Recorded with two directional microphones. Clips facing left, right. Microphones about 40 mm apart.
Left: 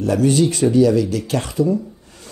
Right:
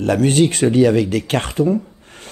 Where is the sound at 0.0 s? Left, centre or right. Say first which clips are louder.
Right 1 dB; right.